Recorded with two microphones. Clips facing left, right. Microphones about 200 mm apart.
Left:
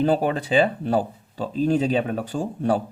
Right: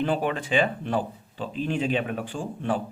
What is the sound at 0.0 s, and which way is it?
Speech, 35° left (ahead or behind).